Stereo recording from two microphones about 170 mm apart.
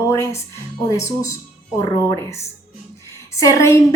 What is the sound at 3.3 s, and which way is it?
Speech, 15° left (ahead or behind).